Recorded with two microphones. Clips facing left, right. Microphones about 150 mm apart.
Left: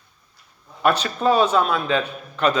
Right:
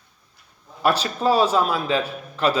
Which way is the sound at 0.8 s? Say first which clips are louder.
Left 1 dB; 30° right (ahead or behind).